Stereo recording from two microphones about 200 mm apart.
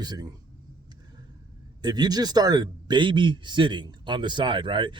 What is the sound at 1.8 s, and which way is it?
A man's voice, 20° right (ahead or behind).